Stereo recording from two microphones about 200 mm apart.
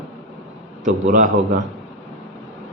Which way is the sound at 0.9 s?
40° right (ahead or behind).